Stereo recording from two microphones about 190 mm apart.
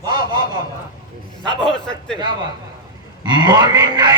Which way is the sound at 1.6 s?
5° left (ahead or behind).